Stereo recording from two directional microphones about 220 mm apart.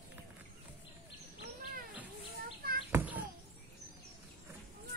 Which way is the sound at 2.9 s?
5° right (ahead or behind).